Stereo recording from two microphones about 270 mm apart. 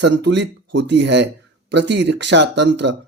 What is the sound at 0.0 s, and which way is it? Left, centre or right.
Speech, right.